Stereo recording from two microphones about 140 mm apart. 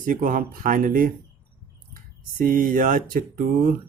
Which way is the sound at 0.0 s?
80° right.